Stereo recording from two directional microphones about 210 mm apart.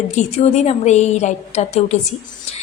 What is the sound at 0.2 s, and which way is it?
A woman's voice, 30° left (ahead or behind).